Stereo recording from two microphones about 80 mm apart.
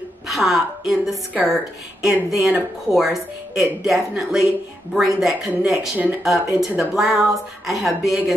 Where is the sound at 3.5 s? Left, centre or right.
Centre.